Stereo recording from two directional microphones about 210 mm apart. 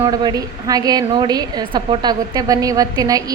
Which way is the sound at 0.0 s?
20° right (ahead or behind).